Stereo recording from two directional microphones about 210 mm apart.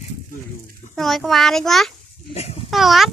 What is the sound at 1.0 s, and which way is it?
Speech, centre (ahead or behind).